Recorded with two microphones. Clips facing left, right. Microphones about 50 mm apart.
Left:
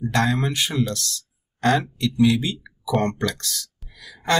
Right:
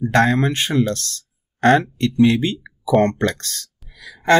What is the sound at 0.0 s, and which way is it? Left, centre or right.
Speech, right.